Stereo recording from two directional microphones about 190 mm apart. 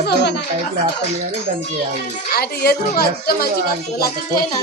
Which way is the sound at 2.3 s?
55° left (ahead or behind).